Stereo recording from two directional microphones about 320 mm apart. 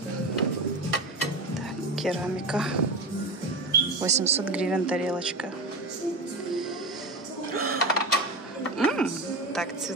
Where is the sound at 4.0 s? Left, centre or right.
Centre.